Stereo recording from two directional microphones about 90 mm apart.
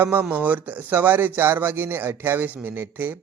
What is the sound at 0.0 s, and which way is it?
Speech, 20° right (ahead or behind).